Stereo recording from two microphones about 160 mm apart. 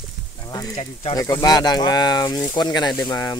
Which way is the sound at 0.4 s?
20° left (ahead or behind).